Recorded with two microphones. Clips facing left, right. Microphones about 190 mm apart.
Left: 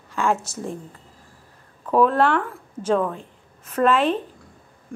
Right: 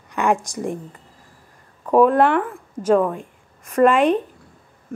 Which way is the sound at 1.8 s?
10° right (ahead or behind).